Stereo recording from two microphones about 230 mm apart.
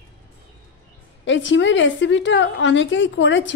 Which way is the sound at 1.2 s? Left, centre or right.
Left.